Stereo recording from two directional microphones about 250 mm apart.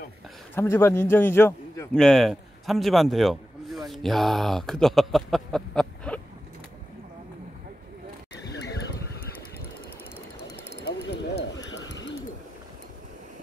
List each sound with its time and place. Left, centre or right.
0.6 s a man's voice: centre
10.5 s bird: left